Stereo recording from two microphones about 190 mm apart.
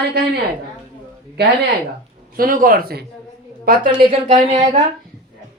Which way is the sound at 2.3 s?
50° right (ahead or behind).